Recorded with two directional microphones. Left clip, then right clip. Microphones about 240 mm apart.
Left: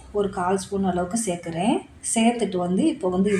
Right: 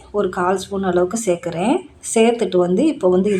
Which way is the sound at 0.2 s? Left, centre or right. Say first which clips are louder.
Right 5 dB; centre.